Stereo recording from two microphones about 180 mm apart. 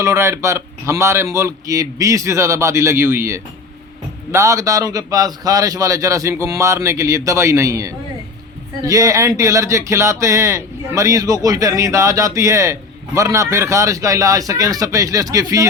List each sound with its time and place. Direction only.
0.0 s speech: 15° right (ahead or behind)